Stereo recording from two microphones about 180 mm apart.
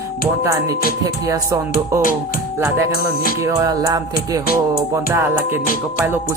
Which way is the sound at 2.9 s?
60° left (ahead or behind).